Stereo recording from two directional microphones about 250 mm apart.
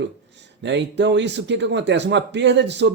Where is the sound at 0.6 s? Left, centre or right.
Right.